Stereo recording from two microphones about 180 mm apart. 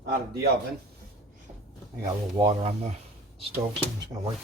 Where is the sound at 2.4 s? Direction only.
25° right (ahead or behind).